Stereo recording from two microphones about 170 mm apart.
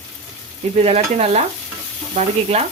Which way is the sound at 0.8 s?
40° right (ahead or behind).